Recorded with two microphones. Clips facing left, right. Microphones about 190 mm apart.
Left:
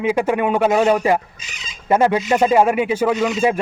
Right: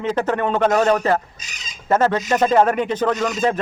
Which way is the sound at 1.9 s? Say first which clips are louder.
Left 2 dB; 10° left (ahead or behind).